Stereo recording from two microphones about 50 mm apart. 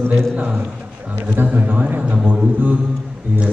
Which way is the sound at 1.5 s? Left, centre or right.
Right.